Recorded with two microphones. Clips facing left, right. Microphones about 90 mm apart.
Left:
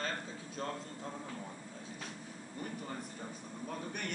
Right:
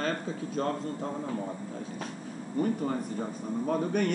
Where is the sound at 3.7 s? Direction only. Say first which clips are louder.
Right 14 dB; 60° right (ahead or behind).